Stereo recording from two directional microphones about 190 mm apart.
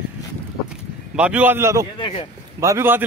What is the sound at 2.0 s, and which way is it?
Speech, 25° left (ahead or behind).